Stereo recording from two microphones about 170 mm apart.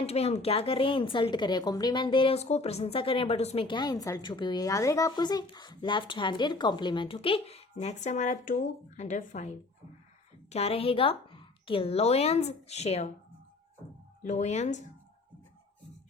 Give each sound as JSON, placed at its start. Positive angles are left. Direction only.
{"t": 0.0, "sound": "a woman's voice", "side_deg": 35}
{"t": 10.5, "sound": "a woman's voice", "side_deg": 35}
{"t": 14.2, "sound": "speech", "side_deg": 45}